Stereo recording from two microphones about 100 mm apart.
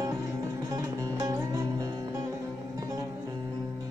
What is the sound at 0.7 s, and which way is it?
Music, 40° right (ahead or behind).